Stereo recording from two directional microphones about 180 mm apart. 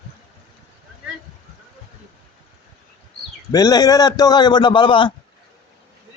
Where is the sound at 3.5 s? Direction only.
20° left (ahead or behind).